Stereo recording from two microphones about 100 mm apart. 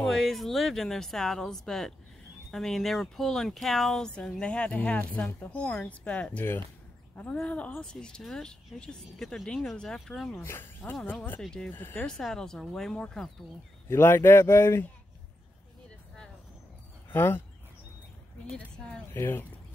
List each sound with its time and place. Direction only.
0.0 s speech: centre (ahead or behind)
7.4 s speech: 15° left (ahead or behind)
10.4 s speech: 20° left (ahead or behind)
11.4 s speech: 5° left (ahead or behind)
11.7 s speech: 20° left (ahead or behind)
12.1 s speech: 5° left (ahead or behind)
13.8 s speech: 25° left (ahead or behind)
17.1 s speech: 25° left (ahead or behind)
19.1 s speech: 20° left (ahead or behind)